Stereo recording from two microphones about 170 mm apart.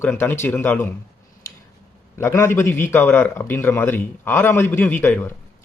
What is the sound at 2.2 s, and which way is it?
A man's voice, 15° left (ahead or behind).